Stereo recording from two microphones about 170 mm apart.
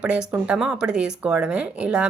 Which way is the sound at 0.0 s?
5° right (ahead or behind).